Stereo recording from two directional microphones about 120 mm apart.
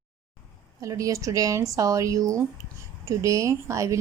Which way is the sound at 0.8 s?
30° right (ahead or behind).